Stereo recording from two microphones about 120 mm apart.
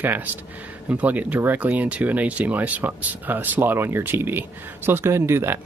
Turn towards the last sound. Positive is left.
turn(degrees=-20)  # may be behind; listen again after turning